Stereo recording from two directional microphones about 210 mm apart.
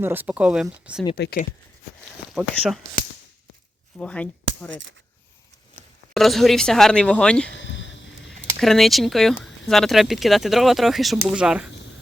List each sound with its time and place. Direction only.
0.0 s speech: 10° right (ahead or behind)
1.1 s speech: 50° left (ahead or behind)
2.3 s speech: centre (ahead or behind)
3.9 s speech: 5° left (ahead or behind)
6.1 s speech: centre (ahead or behind)
7.5 s a sound: 60° left (ahead or behind)
8.6 s speech: centre (ahead or behind)